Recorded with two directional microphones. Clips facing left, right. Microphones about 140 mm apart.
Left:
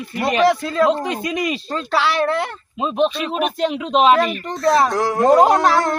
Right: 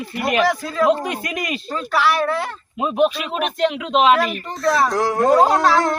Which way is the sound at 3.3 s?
Centre (ahead or behind).